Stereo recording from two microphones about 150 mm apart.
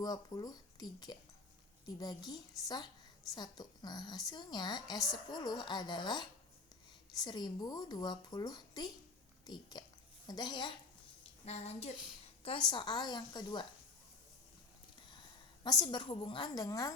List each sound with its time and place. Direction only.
0.0 s speech: 25° left (ahead or behind)
7.3 s speech: 30° left (ahead or behind)
11.4 s speech: 45° left (ahead or behind)
12.5 s speech: 30° left (ahead or behind)
15.6 s speech: 30° left (ahead or behind)